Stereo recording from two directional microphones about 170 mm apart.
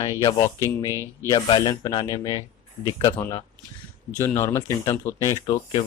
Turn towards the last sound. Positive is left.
turn(degrees=20)  # may be behind; listen again after turning